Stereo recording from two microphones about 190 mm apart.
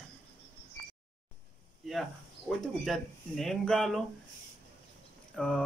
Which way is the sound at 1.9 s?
Centre (ahead or behind).